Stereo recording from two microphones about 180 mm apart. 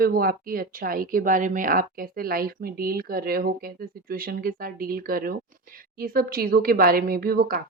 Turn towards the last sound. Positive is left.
turn(degrees=-55)  # may be behind; listen again after turning